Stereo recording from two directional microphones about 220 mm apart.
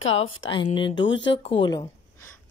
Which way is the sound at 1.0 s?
55° left (ahead or behind).